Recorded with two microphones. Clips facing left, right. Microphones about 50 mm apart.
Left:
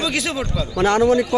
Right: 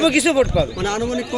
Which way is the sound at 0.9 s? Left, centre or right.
Left.